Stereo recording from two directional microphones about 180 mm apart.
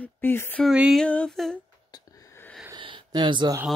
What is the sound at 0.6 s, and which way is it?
Mantra, 5° right (ahead or behind).